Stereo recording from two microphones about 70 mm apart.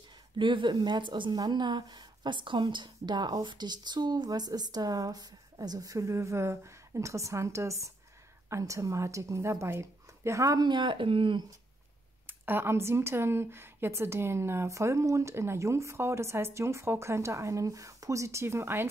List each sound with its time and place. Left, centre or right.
0.7 s a woman's voice: right
10.6 s a woman's voice: right
12.3 s speech: right